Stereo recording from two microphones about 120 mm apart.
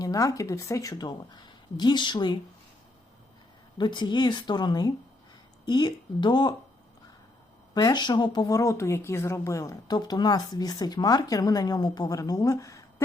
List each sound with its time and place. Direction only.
0.0 s speech: 30° left (ahead or behind)
3.8 s speech: 40° left (ahead or behind)
7.7 s speech: 35° left (ahead or behind)